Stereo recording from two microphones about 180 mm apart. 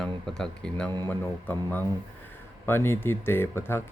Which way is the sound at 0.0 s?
5° left (ahead or behind).